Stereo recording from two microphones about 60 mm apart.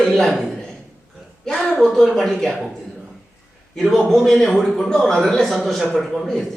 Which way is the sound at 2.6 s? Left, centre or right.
Centre.